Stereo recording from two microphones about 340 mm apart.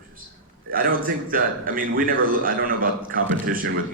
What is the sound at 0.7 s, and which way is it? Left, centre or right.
Speech, right.